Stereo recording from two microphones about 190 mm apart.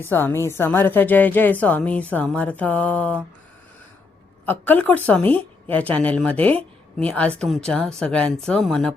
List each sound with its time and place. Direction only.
0.1 s speech: 10° left (ahead or behind)
4.4 s speech: 10° left (ahead or behind)